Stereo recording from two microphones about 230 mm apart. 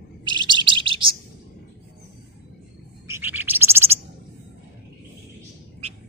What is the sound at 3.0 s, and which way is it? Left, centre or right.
Bird, centre.